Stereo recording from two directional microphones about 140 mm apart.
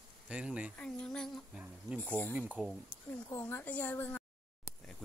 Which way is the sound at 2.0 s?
15° left (ahead or behind).